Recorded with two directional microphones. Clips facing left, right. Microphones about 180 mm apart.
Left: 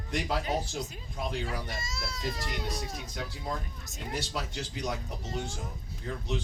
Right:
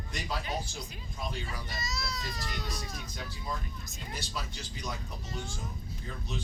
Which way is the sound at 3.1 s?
75° left (ahead or behind).